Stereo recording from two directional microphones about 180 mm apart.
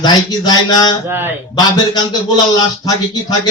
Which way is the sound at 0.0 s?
20° left (ahead or behind).